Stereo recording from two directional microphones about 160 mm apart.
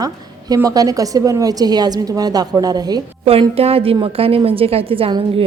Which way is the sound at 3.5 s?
40° right (ahead or behind).